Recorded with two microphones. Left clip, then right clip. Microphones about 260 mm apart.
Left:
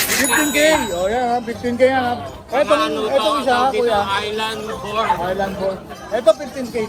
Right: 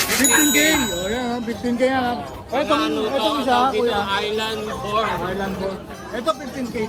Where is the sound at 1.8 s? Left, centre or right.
Centre.